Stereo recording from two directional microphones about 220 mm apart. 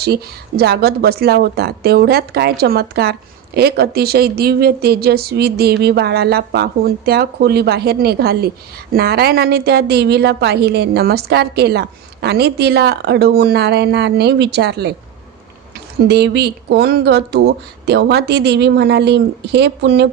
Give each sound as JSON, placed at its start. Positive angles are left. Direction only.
{"t": 0.0, "sound": "speech", "side_deg": -45}
{"t": 16.0, "sound": "speech", "side_deg": -50}